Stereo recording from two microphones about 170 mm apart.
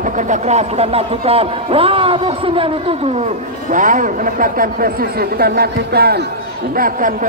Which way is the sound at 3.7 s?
50° right (ahead or behind).